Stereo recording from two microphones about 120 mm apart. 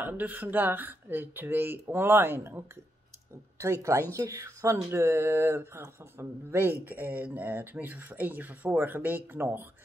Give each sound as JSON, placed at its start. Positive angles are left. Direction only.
{"t": 0.0, "sound": "speech", "side_deg": -15}